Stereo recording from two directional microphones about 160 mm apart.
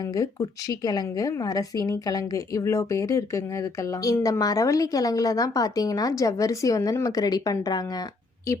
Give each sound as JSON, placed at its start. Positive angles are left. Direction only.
{"t": 0.0, "sound": "a woman's voice", "side_deg": 25}